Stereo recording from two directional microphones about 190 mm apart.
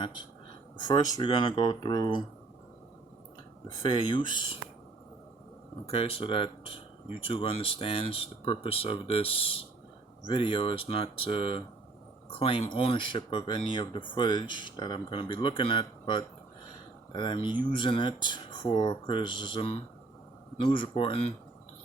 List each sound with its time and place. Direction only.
0.8 s speech: 25° left (ahead or behind)
3.8 s speech: 25° left (ahead or behind)
5.8 s speech: 30° left (ahead or behind)